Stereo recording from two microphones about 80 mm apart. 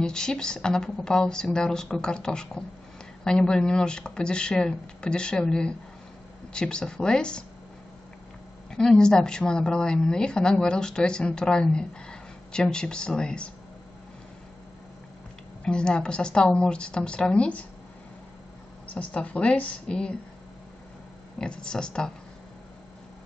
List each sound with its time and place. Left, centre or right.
0.0 s a woman's voice: centre
8.6 s a woman's voice: centre
15.6 s a woman's voice: centre
18.9 s a woman's voice: centre
21.4 s a woman's voice: centre